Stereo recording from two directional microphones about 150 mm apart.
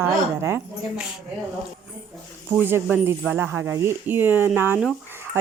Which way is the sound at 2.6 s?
15° right (ahead or behind).